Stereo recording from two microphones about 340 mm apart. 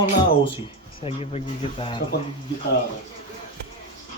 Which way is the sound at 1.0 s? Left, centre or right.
Centre.